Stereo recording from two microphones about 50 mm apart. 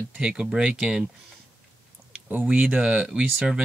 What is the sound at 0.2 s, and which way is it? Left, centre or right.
Speech, centre.